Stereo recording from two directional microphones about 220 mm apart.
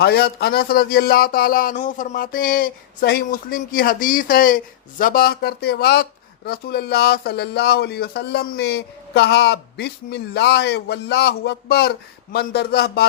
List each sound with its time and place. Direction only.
0.0 s speech: 45° left (ahead or behind)